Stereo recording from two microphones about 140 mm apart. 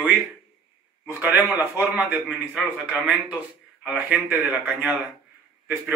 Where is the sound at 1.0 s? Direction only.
10° right (ahead or behind).